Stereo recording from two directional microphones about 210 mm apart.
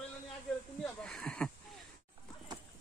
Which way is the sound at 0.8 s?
5° left (ahead or behind).